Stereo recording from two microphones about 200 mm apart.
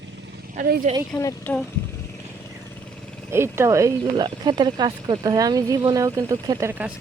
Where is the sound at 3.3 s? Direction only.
15° right (ahead or behind).